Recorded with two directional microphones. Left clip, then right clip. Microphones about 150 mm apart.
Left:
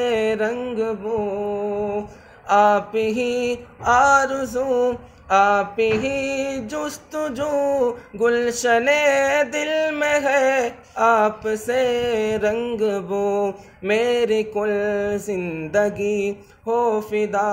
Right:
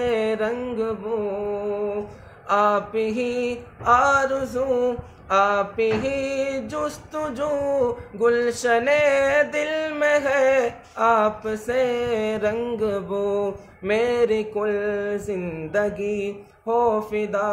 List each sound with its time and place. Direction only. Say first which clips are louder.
0.0 s mantra: left 2 dB; 35° left (ahead or behind)
2.4 s mantra: left 4 dB; 30° left (ahead or behind)